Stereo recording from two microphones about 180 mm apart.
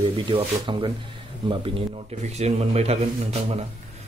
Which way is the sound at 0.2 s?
30° right (ahead or behind).